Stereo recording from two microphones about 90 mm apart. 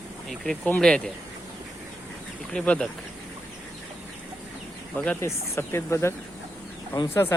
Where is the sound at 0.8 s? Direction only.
10° left (ahead or behind).